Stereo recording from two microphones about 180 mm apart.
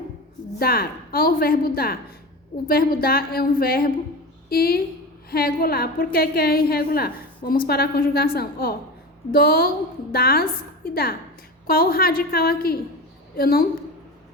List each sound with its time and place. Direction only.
0.6 s a woman's voice: 60° left (ahead or behind)